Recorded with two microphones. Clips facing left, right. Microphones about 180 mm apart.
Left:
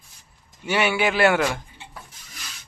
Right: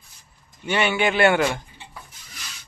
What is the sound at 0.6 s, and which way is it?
Speech, 10° left (ahead or behind).